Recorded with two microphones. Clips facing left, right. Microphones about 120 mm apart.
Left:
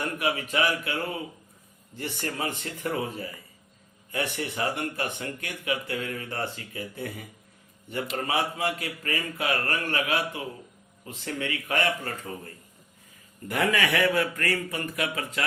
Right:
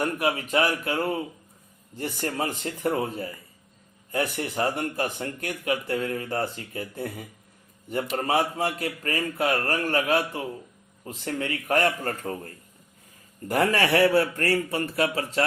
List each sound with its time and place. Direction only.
0.0 s speech: 35° right (ahead or behind)
13.5 s speech: 35° right (ahead or behind)